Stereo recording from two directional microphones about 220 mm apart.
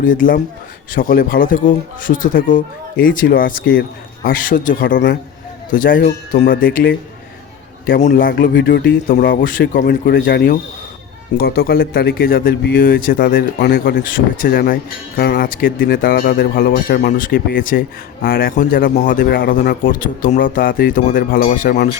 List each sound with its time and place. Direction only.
0.0 s speech: 40° left (ahead or behind)
7.9 s speech: 35° left (ahead or behind)
8.5 s speech: 50° left (ahead or behind)
9.2 s speech: 40° left (ahead or behind)